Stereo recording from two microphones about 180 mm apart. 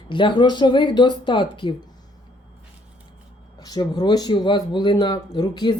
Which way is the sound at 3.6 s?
20° left (ahead or behind).